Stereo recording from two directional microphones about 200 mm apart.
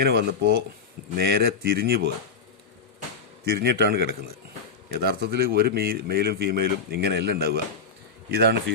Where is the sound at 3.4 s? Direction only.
50° right (ahead or behind).